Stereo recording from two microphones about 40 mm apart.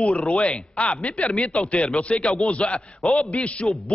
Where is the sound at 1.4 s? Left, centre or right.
Centre.